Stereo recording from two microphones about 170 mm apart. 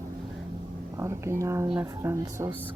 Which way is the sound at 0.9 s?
15° right (ahead or behind).